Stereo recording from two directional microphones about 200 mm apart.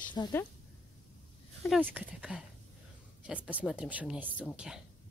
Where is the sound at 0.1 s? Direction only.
20° left (ahead or behind).